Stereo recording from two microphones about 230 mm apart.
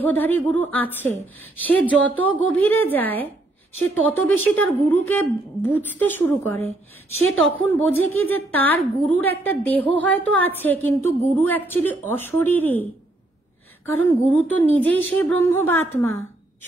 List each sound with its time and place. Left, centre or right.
0.0 s a woman's voice: centre
13.9 s a woman's voice: centre